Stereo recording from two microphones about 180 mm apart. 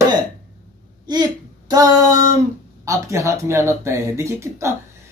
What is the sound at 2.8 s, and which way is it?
Speech, 15° right (ahead or behind).